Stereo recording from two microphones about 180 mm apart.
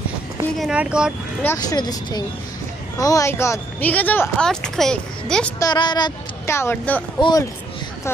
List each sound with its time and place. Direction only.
0.6 s speech: 5° right (ahead or behind)
1.4 s speech: 15° left (ahead or behind)
5.6 s speech: 25° left (ahead or behind)
7.2 s speech: 25° left (ahead or behind)